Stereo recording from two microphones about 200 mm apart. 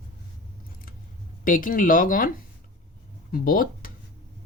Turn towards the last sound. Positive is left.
turn(degrees=45)  # may be behind; listen again after turning